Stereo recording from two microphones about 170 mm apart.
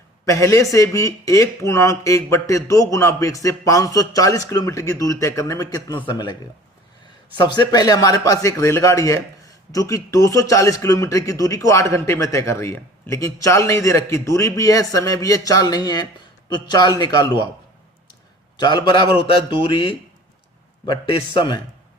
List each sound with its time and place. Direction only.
0.3 s a man's voice: 20° left (ahead or behind)
7.3 s a man's voice: 25° left (ahead or behind)
18.1 s a sound: 25° left (ahead or behind)
19.2 s a man's voice: 30° left (ahead or behind)